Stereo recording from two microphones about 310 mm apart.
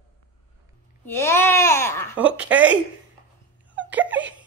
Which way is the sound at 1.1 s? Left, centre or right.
Centre.